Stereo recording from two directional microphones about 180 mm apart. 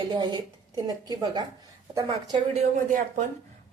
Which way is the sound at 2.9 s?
45° right (ahead or behind).